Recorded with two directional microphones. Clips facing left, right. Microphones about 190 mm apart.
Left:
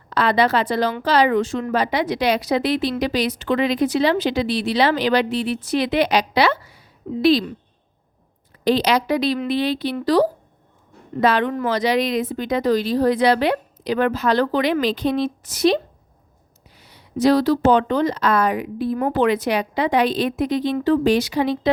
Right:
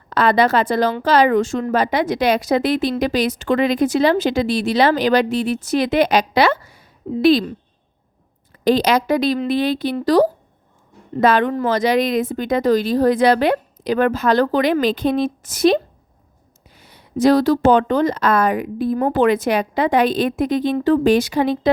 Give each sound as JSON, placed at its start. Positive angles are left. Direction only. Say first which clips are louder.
{"t": 0.1, "sound": "speech", "louder": "right 3 dB", "side_deg": -45}
{"t": 8.6, "sound": "speech", "louder": "right 2 dB", "side_deg": -45}